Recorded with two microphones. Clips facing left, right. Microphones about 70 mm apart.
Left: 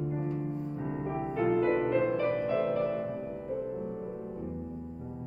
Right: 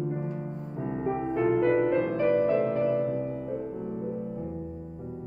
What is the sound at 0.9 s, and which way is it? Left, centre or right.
Music, centre.